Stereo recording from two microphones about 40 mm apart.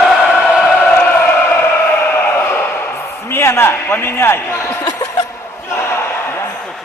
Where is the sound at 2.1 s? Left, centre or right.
Left.